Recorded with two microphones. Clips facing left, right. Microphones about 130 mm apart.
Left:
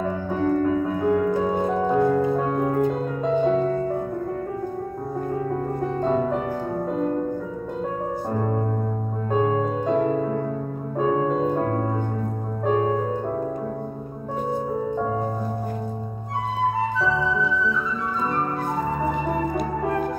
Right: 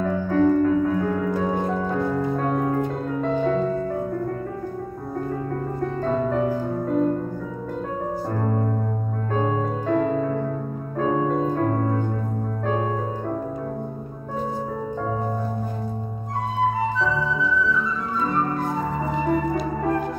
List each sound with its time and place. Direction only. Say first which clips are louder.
0.0 s music: right 4 dB; 15° left (ahead or behind)
2.5 s music: left 1 dB; 5° left (ahead or behind)
3.2 s music: left 1 dB; 15° left (ahead or behind)
6.0 s music: even; 15° left (ahead or behind)
8.4 s music: even; 15° left (ahead or behind)